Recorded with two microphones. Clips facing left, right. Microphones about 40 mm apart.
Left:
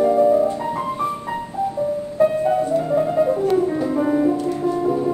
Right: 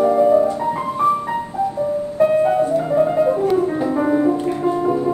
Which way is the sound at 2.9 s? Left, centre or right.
Centre.